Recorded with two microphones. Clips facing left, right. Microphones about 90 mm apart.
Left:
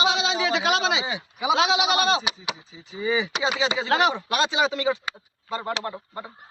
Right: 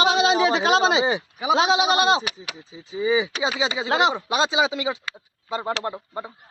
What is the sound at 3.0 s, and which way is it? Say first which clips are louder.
Speech: right 3 dB; 15° right (ahead or behind).